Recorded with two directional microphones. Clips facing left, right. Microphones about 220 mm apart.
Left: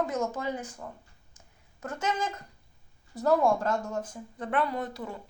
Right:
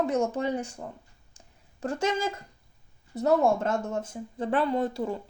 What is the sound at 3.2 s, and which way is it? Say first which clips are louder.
Speech: right 1 dB; 25° right (ahead or behind).